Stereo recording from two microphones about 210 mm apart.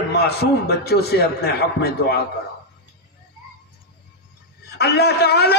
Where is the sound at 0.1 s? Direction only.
50° left (ahead or behind).